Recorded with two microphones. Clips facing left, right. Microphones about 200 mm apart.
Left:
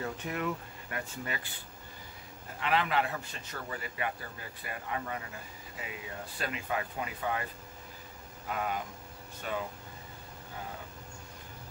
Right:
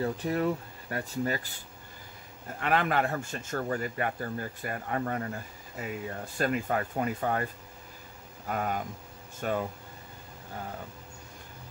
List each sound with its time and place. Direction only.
0.0 s speech: 35° right (ahead or behind)
2.6 s speech: 50° right (ahead or behind)
8.5 s speech: 45° right (ahead or behind)